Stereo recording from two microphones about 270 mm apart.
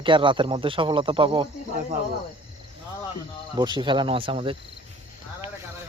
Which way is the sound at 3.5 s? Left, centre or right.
Centre.